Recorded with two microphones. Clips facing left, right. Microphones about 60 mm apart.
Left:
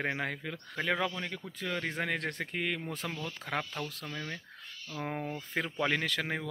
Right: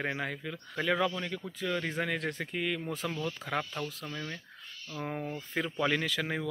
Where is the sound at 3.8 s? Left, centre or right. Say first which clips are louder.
Right 2 dB; left.